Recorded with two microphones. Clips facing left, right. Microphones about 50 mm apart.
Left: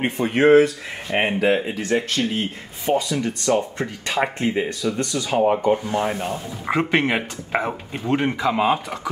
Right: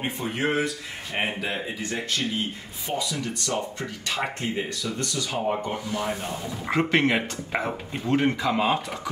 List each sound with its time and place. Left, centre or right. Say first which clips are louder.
0.0 s speech: left 9 dB; left
1.8 s speech: left 7 dB; left
2.9 s speech: left 8 dB; left
6.6 s speech: left 2 dB; centre